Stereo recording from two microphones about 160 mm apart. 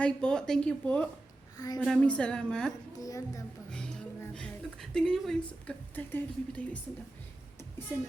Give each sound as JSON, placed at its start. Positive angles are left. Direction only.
{"t": 0.0, "sound": "a woman's voice", "side_deg": 5}
{"t": 1.5, "sound": "speech", "side_deg": 25}
{"t": 1.8, "sound": "a woman's voice", "side_deg": 5}
{"t": 3.0, "sound": "speech", "side_deg": 20}
{"t": 3.7, "sound": "a sound", "side_deg": 5}
{"t": 5.5, "sound": "speech", "side_deg": 10}